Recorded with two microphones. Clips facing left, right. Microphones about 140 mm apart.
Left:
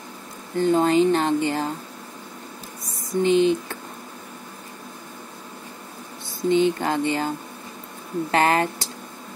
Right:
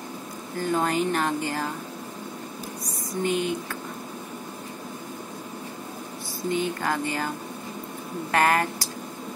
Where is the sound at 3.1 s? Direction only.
25° left (ahead or behind).